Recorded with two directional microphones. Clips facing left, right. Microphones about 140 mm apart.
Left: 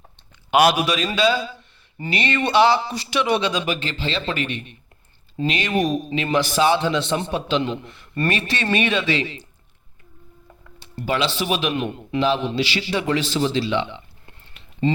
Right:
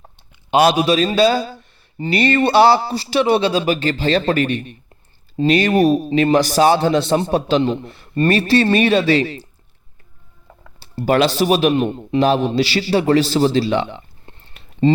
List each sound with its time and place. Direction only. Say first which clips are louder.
0.5 s a man's voice: right 4 dB; 30° right (ahead or behind)
10.8 s computer keyboard: right 7 dB; 35° right (ahead or behind)
11.1 s a man's voice: right 8 dB; 45° right (ahead or behind)
12.2 s a man's voice: right 5 dB; 45° right (ahead or behind)
14.3 s a sound: right 4 dB; 35° right (ahead or behind)